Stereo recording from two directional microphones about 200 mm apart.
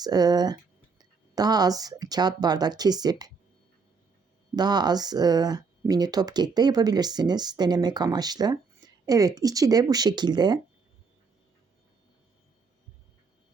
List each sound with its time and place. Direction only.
0.0 s speech: 20° right (ahead or behind)
4.5 s speech: 20° right (ahead or behind)